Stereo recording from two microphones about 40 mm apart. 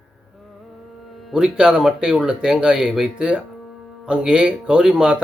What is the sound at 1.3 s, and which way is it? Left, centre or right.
Speech, right.